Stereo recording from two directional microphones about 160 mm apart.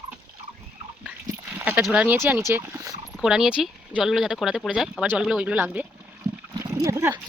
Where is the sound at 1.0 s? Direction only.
10° right (ahead or behind).